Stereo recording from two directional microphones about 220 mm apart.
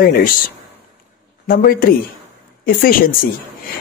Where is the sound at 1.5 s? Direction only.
40° left (ahead or behind).